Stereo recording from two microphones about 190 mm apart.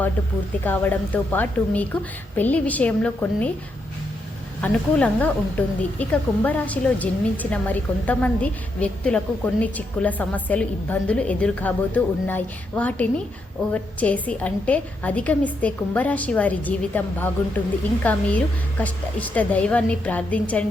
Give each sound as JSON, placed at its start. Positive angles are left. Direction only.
{"t": 0.6, "sound": "a woman's voice", "side_deg": 10}
{"t": 4.6, "sound": "a woman's voice", "side_deg": 5}